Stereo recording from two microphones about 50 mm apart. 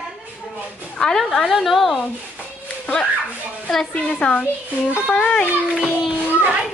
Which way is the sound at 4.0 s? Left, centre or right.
Left.